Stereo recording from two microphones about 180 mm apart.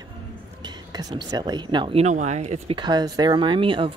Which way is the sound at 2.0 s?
40° right (ahead or behind).